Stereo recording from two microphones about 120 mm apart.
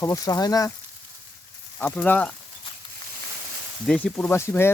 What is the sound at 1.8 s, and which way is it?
Speech, 15° left (ahead or behind).